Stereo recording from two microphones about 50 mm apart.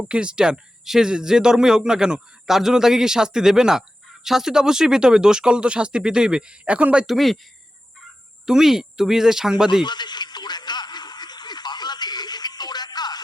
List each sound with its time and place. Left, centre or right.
0.1 s speech: centre
7.1 s speech: centre
8.4 s speech: centre